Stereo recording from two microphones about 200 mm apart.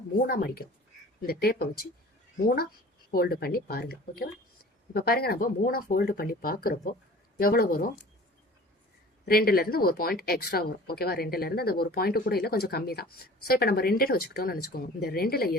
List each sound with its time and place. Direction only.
0.2 s speech: 50° left (ahead or behind)
3.1 s speech: 50° left (ahead or behind)
9.2 s speech: 50° left (ahead or behind)